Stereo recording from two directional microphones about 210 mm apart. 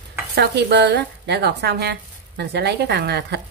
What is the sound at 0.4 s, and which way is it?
A woman's voice, 50° right (ahead or behind).